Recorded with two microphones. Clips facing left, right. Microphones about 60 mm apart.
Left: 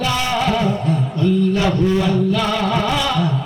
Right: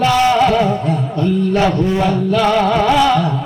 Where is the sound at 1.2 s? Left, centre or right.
Right.